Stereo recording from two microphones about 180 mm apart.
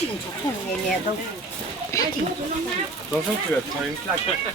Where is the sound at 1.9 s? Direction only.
15° left (ahead or behind).